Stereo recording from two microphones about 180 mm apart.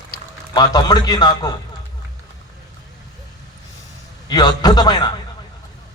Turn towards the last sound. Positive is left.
turn(degrees=25)  # may be behind; listen again after turning